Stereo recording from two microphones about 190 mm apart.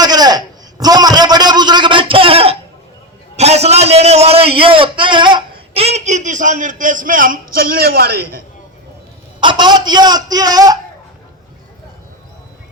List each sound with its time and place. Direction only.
0.0 s a sound: 20° right (ahead or behind)
3.3 s a man's voice: 35° right (ahead or behind); by 8.4 s 55° right (ahead or behind)
9.4 s a man's voice: 25° right (ahead or behind)